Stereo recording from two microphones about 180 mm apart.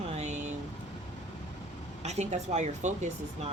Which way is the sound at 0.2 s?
40° right (ahead or behind).